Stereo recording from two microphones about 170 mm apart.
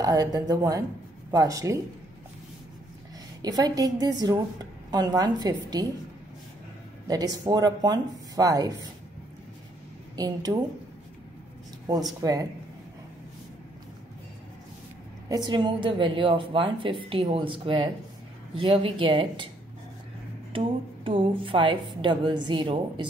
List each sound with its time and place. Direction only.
0.0 s a woman's voice: 20° right (ahead or behind)
3.4 s a woman's voice: 20° right (ahead or behind)
7.1 s a woman's voice: 20° right (ahead or behind)
10.1 s a woman's voice: 20° right (ahead or behind)
12.2 s a woman's voice: 20° right (ahead or behind)
15.2 s a woman's voice: 25° right (ahead or behind)
20.5 s a woman's voice: 30° right (ahead or behind)